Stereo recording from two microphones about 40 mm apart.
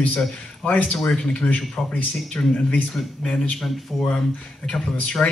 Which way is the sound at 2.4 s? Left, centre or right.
Left.